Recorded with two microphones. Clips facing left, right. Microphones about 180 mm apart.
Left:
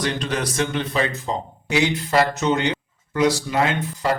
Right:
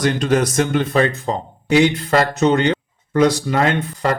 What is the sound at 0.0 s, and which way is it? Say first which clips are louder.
Speech: right 7 dB; 45° right (ahead or behind).